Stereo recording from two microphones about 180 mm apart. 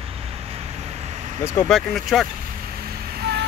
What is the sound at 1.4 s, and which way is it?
Speech, 10° left (ahead or behind).